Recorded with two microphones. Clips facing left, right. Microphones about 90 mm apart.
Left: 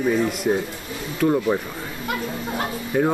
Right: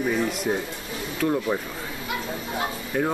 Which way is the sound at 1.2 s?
5° left (ahead or behind).